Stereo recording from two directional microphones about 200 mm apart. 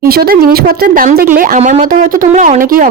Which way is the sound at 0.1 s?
50° right (ahead or behind).